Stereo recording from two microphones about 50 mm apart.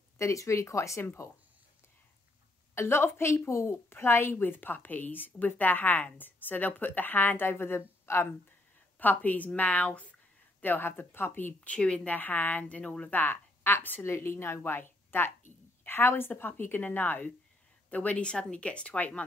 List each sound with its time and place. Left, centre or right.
0.2 s speech: left
1.0 s speech: left
2.7 s a woman's voice: left
3.9 s a woman's voice: left
8.9 s speech: left
10.6 s a woman's voice: left
11.6 s speech: left
12.1 s a woman's voice: left
13.2 s a woman's voice: left
14.0 s speech: left
17.8 s speech: left